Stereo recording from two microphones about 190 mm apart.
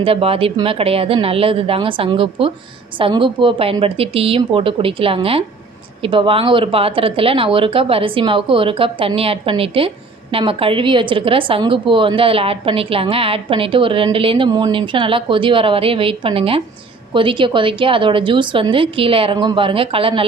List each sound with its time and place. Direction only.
0.0 s a woman's voice: 30° right (ahead or behind)